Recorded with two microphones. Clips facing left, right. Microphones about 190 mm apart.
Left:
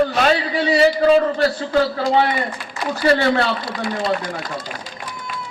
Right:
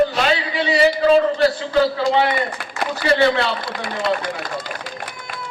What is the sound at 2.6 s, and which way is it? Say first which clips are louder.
Speech: right 2 dB; 60° right (ahead or behind).